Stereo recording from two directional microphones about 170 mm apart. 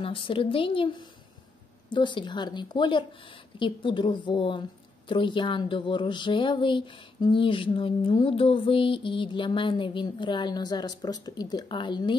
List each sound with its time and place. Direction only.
0.0 s a woman's voice: 30° left (ahead or behind)